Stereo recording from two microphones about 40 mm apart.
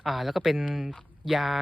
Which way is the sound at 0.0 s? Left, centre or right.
Centre.